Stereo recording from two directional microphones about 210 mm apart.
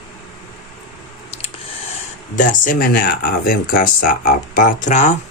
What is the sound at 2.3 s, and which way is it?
Speech, 35° left (ahead or behind).